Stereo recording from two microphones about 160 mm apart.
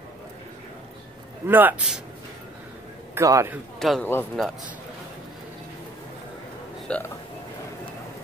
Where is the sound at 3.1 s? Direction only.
20° right (ahead or behind).